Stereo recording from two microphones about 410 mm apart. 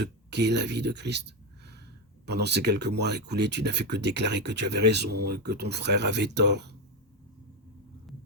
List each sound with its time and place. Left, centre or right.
0.0 s speech: right
2.2 s speech: right